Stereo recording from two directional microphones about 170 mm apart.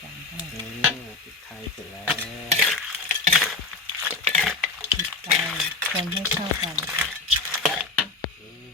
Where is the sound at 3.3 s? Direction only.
Centre (ahead or behind).